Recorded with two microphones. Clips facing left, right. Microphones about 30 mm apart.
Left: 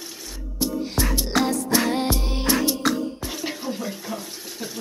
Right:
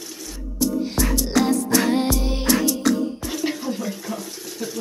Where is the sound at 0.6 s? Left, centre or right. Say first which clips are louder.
Right 3 dB; left.